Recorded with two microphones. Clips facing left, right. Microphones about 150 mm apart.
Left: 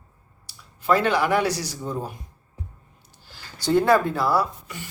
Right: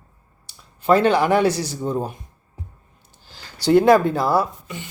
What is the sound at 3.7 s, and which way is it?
Speech, 15° right (ahead or behind).